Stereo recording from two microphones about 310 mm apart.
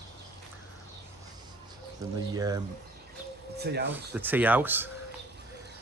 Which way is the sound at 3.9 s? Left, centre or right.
Centre.